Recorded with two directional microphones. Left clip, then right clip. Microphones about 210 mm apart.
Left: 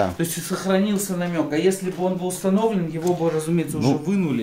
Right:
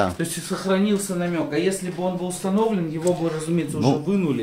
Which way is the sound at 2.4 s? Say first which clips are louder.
Left 3 dB; 40° left (ahead or behind).